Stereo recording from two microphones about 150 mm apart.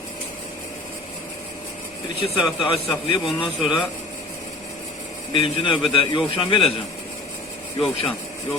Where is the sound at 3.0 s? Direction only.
35° left (ahead or behind).